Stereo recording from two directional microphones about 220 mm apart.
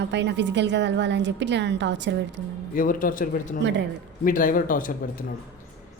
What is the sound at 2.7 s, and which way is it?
Speech, 40° left (ahead or behind).